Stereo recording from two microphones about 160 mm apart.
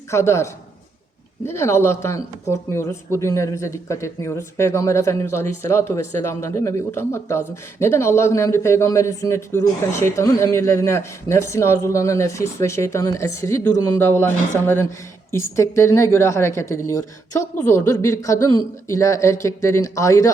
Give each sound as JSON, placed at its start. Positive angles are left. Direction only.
{"t": 0.1, "sound": "speech", "side_deg": 15}
{"t": 15.3, "sound": "speech", "side_deg": 20}